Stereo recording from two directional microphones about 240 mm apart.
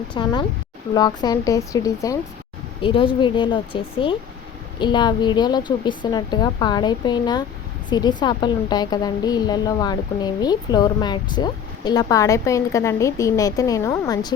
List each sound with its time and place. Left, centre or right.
0.1 s a woman's voice: centre